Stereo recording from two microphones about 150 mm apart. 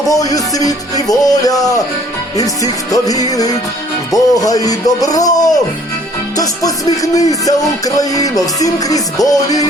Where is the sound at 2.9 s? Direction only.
25° left (ahead or behind).